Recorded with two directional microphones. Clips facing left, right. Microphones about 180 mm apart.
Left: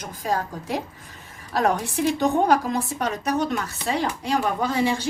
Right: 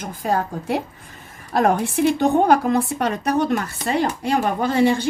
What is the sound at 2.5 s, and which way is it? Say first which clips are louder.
A woman's voice: right 4 dB; 60° right (ahead or behind).